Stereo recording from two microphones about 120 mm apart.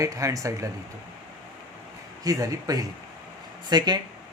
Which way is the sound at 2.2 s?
30° right (ahead or behind).